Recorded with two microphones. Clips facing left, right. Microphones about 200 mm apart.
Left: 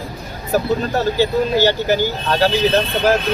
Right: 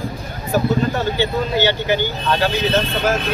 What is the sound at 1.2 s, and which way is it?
Speech, 40° left (ahead or behind).